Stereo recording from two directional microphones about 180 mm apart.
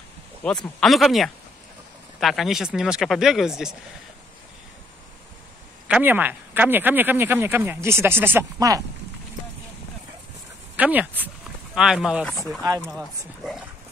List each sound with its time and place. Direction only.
0.4 s speech: 5° left (ahead or behind)
5.9 s speech: 10° right (ahead or behind)
10.8 s speech: 10° right (ahead or behind)